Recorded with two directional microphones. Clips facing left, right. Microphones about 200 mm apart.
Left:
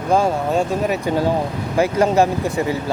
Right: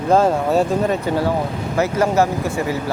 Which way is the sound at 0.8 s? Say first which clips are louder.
Even; 15° left (ahead or behind).